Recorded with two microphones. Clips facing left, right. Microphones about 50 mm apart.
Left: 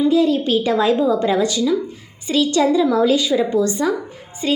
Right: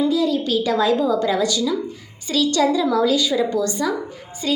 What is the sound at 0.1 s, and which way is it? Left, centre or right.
A woman's voice, left.